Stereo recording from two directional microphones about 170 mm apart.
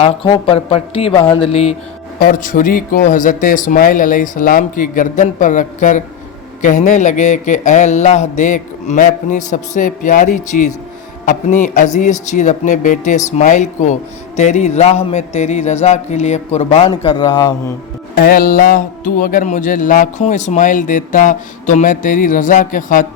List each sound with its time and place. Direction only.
0.0 s a man's voice: 30° left (ahead or behind)
2.1 s a man's voice: 55° left (ahead or behind); by 17.5 s 25° left (ahead or behind)
18.2 s speech: 55° left (ahead or behind)